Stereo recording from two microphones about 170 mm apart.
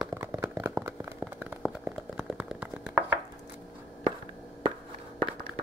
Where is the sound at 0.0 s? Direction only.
15° right (ahead or behind).